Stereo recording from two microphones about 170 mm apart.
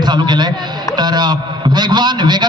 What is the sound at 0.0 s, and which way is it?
A man's voice, 25° right (ahead or behind).